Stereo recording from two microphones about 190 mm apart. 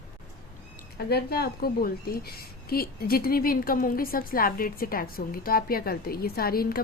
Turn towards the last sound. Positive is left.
turn(degrees=50)  # may be behind; listen again after turning